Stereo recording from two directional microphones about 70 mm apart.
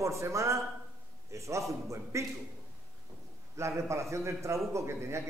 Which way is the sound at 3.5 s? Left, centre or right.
Right.